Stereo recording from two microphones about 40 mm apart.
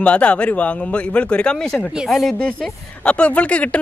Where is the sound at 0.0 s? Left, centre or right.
Left.